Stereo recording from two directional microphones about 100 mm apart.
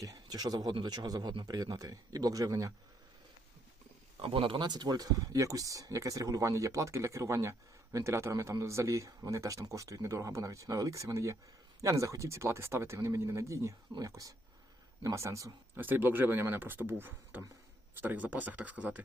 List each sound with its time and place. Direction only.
0.0 s speech: 40° right (ahead or behind)
4.2 s speech: 60° right (ahead or behind); by 15.8 s 30° right (ahead or behind)
15.8 s speech: 20° right (ahead or behind)